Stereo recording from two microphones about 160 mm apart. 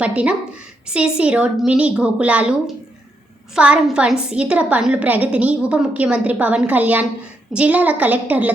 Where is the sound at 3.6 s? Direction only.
5° right (ahead or behind).